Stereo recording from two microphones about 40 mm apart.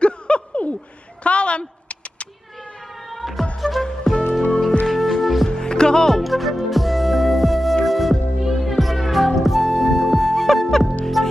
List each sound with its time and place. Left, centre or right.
0.0 s chuckle: left
1.2 s a sound: left
3.1 s music: centre
5.5 s music: centre
6.0 s music: centre